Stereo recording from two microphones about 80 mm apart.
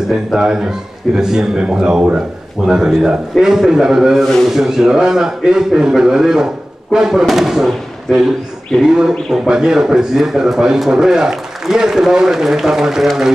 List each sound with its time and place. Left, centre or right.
0.1 s a man's voice: centre